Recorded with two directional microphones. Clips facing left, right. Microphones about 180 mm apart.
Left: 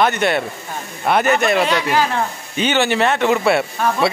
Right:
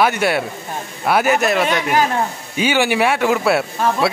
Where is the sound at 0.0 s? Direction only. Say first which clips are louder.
Even; 5° right (ahead or behind).